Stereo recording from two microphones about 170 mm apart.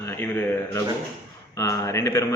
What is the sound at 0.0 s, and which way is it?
A man's voice, 10° left (ahead or behind).